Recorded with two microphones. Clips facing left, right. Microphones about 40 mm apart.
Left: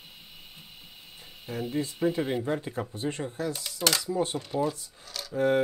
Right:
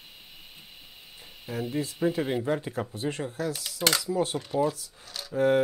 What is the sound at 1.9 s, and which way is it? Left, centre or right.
Speech, centre.